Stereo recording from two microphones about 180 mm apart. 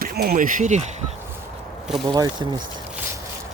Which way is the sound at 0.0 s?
55° right (ahead or behind).